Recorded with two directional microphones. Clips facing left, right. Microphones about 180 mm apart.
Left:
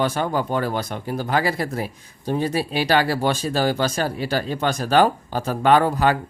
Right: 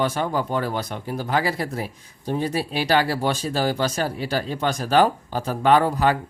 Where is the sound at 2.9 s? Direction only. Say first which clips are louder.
Left 1 dB; 65° left (ahead or behind).